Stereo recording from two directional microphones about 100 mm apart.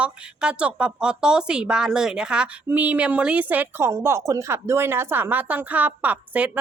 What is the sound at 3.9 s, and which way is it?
Speech, 30° right (ahead or behind).